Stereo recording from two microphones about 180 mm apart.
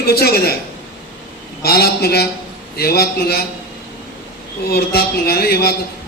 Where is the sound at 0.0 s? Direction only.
60° left (ahead or behind).